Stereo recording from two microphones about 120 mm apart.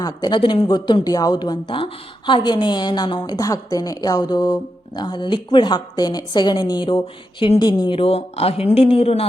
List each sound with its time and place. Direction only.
0.0 s a man's voice: 35° left (ahead or behind); by 9.2 s 55° left (ahead or behind)